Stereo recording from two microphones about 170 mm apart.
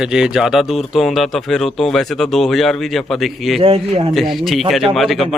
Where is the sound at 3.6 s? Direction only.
35° right (ahead or behind).